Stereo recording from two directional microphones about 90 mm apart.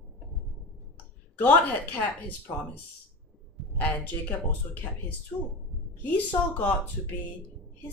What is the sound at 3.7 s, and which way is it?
Speech, 15° left (ahead or behind).